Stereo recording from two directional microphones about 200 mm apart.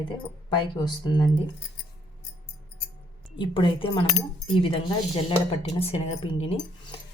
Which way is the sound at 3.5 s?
25° left (ahead or behind).